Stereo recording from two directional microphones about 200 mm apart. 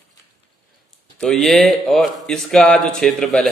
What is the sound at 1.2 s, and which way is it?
A man's voice, centre (ahead or behind).